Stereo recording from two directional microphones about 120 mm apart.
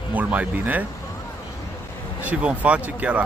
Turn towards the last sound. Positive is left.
turn(degrees=-10)  # may be behind; listen again after turning